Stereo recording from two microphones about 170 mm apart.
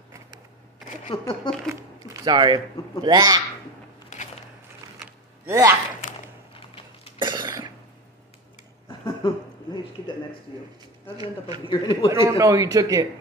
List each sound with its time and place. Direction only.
1.0 s speech: 35° left (ahead or behind)
2.2 s speech: 25° right (ahead or behind)
4.1 s a sound: 45° left (ahead or behind)
5.5 s speech: 15° right (ahead or behind)
7.2 s cough: 25° right (ahead or behind)
8.8 s a sound: 25° left (ahead or behind)
11.1 s speech: 25° right (ahead or behind)
11.6 s a man's voice: 25° left (ahead or behind)
12.1 s speech: 15° right (ahead or behind)